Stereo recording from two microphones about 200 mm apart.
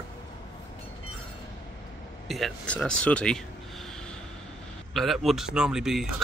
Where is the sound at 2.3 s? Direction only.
Centre (ahead or behind).